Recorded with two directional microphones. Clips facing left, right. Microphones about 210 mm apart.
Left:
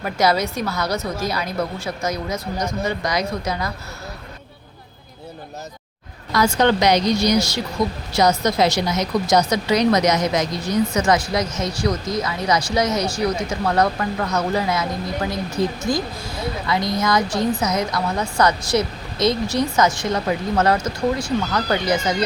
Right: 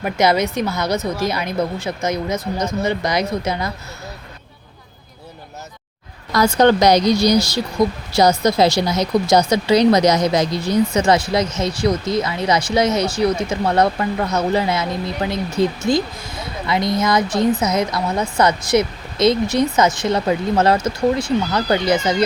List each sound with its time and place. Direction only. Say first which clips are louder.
0.0 s a woman's voice: right 3 dB; 20° right (ahead or behind)
6.3 s a woman's voice: right 4 dB; 35° right (ahead or behind)